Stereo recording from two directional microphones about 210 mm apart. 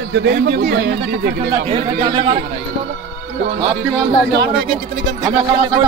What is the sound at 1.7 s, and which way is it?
Speech, 30° right (ahead or behind).